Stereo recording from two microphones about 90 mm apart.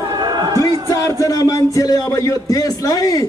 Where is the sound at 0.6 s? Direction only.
40° left (ahead or behind).